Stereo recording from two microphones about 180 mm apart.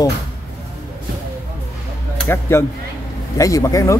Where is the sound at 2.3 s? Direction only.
15° left (ahead or behind).